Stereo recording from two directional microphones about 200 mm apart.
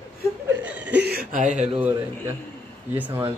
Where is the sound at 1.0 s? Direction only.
50° right (ahead or behind).